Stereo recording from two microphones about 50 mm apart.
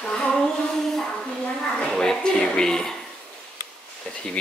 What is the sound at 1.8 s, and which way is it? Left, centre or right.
Speech, centre.